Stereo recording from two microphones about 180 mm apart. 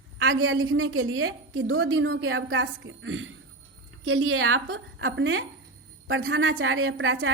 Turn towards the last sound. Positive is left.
turn(degrees=-90)